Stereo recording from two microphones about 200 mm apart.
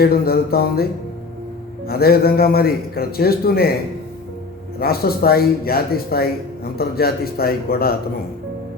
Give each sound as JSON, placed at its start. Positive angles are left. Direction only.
{"t": 0.0, "sound": "a man's voice", "side_deg": 50}
{"t": 1.9, "sound": "a man's voice", "side_deg": 50}
{"t": 4.8, "sound": "a man's voice", "side_deg": 50}